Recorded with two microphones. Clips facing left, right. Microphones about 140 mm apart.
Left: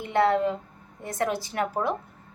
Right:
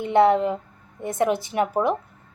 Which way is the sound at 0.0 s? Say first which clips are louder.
Right 5 dB; 20° right (ahead or behind).